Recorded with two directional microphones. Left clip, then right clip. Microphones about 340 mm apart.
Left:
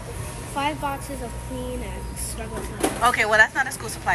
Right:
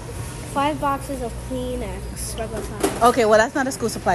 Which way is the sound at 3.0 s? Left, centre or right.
Centre.